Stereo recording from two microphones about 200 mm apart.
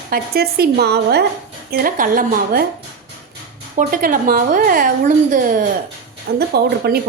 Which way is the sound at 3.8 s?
45° right (ahead or behind).